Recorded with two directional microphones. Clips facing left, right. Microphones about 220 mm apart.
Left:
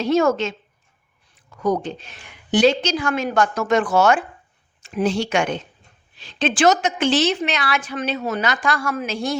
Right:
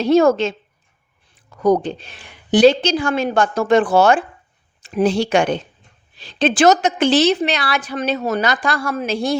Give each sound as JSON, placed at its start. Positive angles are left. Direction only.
{"t": 0.0, "sound": "a woman's voice", "side_deg": -35}
{"t": 1.6, "sound": "a woman's voice", "side_deg": -35}